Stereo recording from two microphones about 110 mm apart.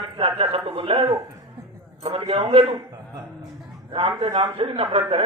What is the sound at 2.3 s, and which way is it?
Speech, 55° right (ahead or behind).